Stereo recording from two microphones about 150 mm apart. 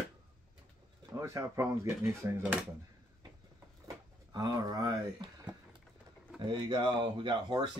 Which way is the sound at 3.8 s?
25° right (ahead or behind).